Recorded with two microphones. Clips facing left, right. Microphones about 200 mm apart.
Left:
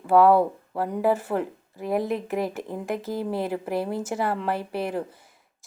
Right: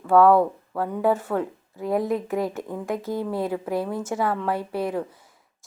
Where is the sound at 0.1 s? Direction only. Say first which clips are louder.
Right 1 dB; 5° left (ahead or behind).